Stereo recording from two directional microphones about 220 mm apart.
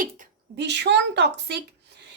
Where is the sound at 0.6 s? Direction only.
50° right (ahead or behind).